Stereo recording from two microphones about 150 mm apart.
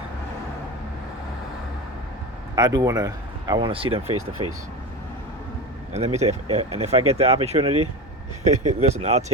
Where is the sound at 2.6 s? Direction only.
25° right (ahead or behind).